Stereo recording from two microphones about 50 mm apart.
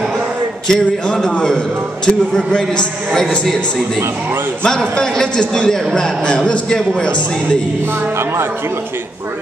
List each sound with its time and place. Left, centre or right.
0.7 s a man's voice: centre
3.1 s a man's voice: centre
4.6 s a man's voice: centre